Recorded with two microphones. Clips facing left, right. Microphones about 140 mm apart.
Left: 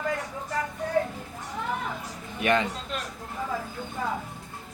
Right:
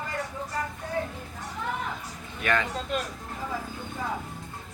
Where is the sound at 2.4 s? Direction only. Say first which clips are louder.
Left 3 dB; 20° left (ahead or behind).